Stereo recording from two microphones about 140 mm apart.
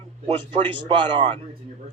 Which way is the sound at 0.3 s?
35° right (ahead or behind).